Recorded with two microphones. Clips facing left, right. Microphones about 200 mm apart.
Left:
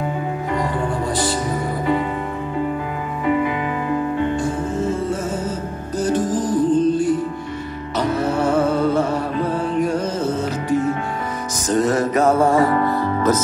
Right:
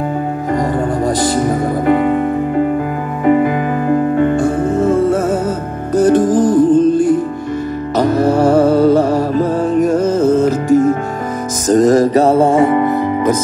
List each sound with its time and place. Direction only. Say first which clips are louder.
0.7 s music: right 6 dB; 45° right (ahead or behind); by 13.4 s 15° right (ahead or behind)